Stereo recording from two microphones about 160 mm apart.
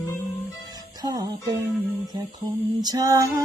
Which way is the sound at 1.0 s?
25° right (ahead or behind).